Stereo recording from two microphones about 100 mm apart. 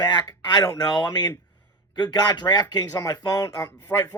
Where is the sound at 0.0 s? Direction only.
45° left (ahead or behind).